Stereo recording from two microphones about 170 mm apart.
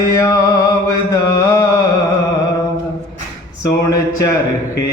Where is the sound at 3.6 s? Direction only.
20° left (ahead or behind).